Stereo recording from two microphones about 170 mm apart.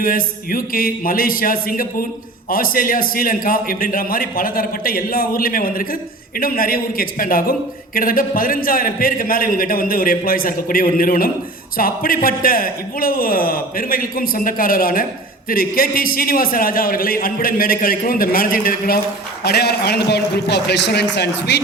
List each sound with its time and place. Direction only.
0.0 s a man's voice: 55° left (ahead or behind)
19.5 s a man's voice: 70° left (ahead or behind)